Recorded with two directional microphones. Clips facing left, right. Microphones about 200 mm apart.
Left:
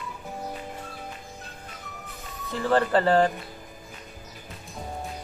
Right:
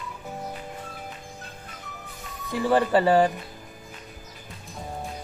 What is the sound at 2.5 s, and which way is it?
Speech, 15° right (ahead or behind).